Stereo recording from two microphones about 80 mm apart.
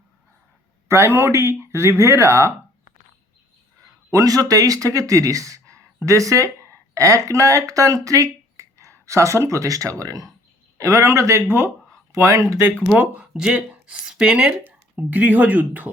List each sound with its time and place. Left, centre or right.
0.9 s speech: right
4.1 s speech: right
12.9 s speech: centre
14.9 s speech: right